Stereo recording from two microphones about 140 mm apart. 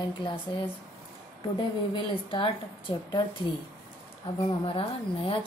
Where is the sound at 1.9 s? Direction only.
35° left (ahead or behind).